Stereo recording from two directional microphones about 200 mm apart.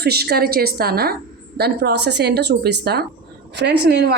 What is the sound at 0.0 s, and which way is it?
A woman's voice, 55° right (ahead or behind).